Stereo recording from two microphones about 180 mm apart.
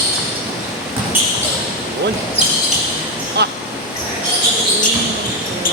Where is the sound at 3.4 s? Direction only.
70° right (ahead or behind).